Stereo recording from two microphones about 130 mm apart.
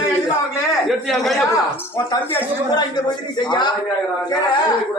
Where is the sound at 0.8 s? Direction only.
Centre (ahead or behind).